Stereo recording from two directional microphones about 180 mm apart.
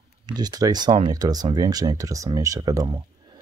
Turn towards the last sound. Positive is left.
turn(degrees=-25)  # may be behind; listen again after turning